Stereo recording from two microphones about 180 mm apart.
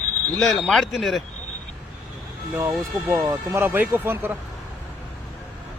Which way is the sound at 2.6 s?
15° right (ahead or behind).